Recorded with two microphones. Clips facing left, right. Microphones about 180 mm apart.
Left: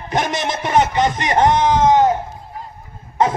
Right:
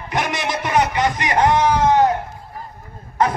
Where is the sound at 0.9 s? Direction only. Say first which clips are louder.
Left 2 dB; 25° left (ahead or behind).